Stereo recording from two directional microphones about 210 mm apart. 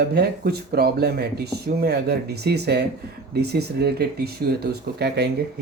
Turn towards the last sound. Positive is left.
turn(degrees=-50)  # may be behind; listen again after turning